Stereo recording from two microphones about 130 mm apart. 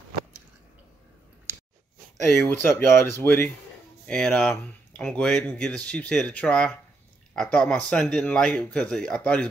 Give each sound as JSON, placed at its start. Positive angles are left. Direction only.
{"t": 2.4, "sound": "speech", "side_deg": 20}
{"t": 4.0, "sound": "a sound", "side_deg": 5}
{"t": 4.4, "sound": "speech", "side_deg": 5}